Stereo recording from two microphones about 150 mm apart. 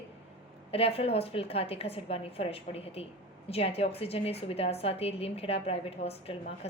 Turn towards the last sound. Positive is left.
turn(degrees=45)  # may be behind; listen again after turning